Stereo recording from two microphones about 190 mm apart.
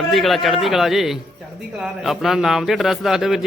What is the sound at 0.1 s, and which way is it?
Speech, centre (ahead or behind).